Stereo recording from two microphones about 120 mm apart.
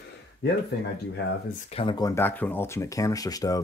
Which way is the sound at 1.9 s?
30° left (ahead or behind).